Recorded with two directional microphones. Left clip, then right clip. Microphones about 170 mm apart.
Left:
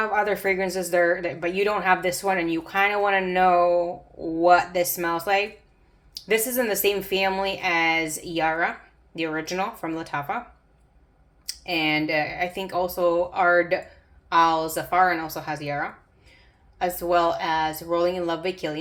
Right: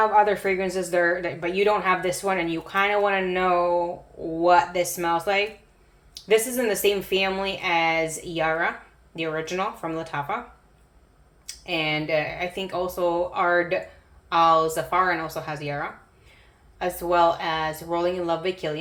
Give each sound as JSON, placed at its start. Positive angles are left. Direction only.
{"t": 0.0, "sound": "a woman's voice", "side_deg": 35}
{"t": 11.4, "sound": "a woman's voice", "side_deg": 35}